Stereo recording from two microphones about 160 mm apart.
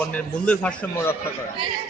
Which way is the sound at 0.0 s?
10° left (ahead or behind).